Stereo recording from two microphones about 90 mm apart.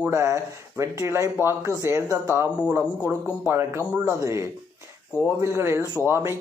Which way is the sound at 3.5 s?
30° right (ahead or behind).